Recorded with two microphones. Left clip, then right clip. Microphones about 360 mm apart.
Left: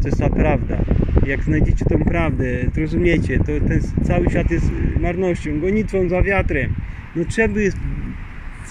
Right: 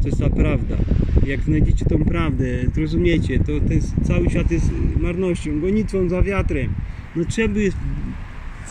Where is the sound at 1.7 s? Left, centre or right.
Left.